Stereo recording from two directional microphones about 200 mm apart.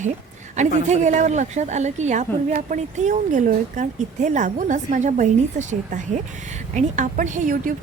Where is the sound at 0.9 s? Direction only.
35° right (ahead or behind).